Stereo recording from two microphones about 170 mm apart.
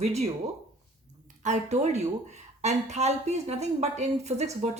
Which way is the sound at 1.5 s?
45° right (ahead or behind).